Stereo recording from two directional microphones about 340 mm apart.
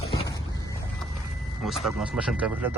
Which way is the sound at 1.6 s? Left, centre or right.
Centre.